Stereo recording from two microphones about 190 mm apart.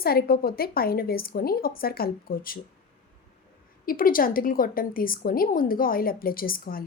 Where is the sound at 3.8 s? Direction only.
50° left (ahead or behind).